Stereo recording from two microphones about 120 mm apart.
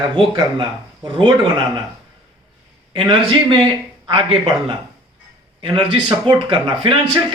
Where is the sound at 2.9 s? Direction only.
40° right (ahead or behind).